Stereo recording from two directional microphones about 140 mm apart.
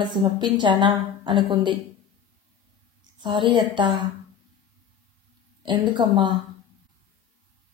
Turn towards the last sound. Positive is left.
turn(degrees=-35)  # may be behind; listen again after turning